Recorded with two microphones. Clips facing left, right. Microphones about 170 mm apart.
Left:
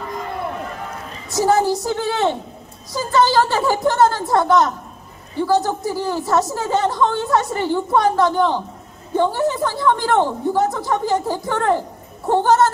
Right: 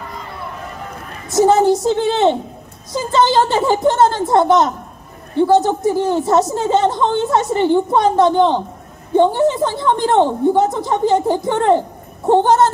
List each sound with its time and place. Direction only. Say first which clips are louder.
1.3 s a woman's voice: right 5 dB; 20° right (ahead or behind)